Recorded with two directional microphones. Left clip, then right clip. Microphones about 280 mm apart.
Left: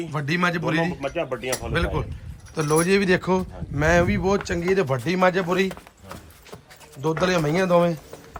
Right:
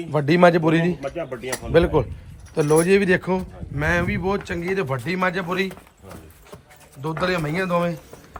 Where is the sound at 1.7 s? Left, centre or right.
Centre.